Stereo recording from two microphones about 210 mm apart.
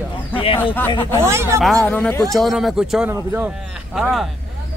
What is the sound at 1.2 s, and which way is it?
Speech, 10° right (ahead or behind).